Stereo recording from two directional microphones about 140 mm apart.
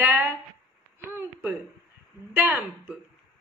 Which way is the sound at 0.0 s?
15° right (ahead or behind).